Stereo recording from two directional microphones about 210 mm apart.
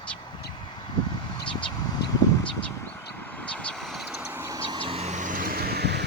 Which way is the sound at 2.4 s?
10° left (ahead or behind).